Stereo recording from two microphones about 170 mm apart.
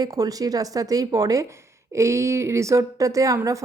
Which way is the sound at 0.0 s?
20° right (ahead or behind).